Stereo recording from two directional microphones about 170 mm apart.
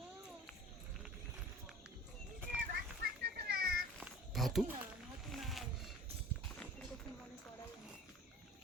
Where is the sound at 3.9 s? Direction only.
Centre (ahead or behind).